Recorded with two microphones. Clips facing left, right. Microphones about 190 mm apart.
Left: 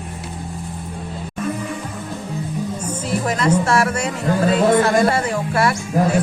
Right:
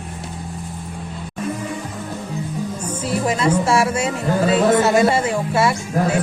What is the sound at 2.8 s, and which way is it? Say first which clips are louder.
Music: right 3 dB; 10° right (ahead or behind).